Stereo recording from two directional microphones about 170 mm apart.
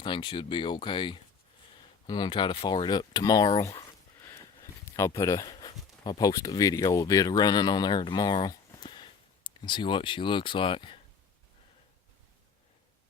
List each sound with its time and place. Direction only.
0.0 s speech: 25° left (ahead or behind)